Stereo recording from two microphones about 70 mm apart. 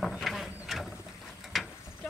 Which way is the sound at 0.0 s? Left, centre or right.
Centre.